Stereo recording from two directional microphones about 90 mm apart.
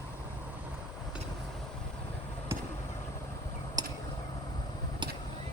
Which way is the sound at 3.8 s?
45° right (ahead or behind).